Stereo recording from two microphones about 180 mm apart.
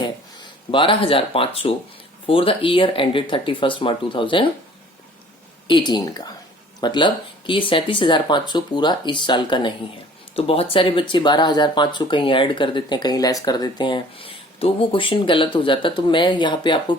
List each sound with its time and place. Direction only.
0.0 s speech: 25° left (ahead or behind)
5.6 s speech: 25° left (ahead or behind)